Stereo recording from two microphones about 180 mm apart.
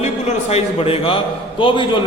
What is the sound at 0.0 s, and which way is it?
A man's voice, 35° left (ahead or behind).